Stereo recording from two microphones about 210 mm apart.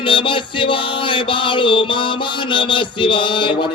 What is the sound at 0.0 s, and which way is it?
Music, 25° left (ahead or behind).